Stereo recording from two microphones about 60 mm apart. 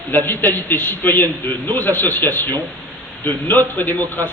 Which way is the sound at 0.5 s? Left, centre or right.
Left.